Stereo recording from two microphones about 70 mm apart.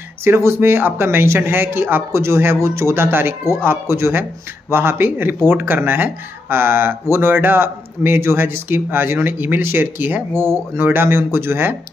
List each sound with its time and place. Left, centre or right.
0.2 s speech: right